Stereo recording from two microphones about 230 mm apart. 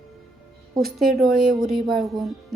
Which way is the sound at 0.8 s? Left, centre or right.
Centre.